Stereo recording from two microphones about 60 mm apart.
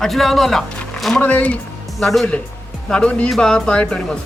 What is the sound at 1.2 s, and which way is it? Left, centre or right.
Speech, left.